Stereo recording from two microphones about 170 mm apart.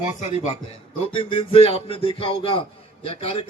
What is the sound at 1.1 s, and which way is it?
A man's voice, 30° left (ahead or behind).